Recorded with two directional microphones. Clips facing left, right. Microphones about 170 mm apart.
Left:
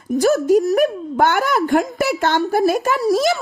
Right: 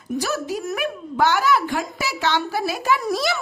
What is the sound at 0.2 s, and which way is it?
Speech, 50° left (ahead or behind).